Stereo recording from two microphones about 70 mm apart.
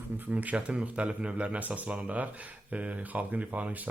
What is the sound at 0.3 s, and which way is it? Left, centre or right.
Speech, centre.